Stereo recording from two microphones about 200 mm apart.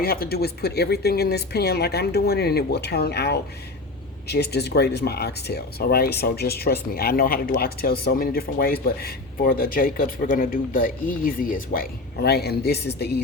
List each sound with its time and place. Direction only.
0.0 s speech: 50° left (ahead or behind)